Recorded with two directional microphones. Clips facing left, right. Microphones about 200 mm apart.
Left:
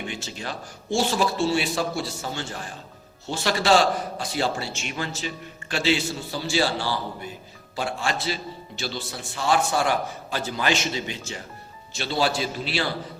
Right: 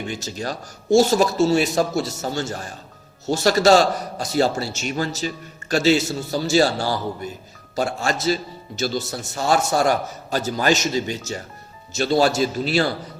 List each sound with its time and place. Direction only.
0.1 s a man's voice: 40° right (ahead or behind)